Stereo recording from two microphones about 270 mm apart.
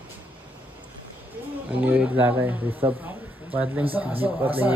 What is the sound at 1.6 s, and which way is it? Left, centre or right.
Speech, centre.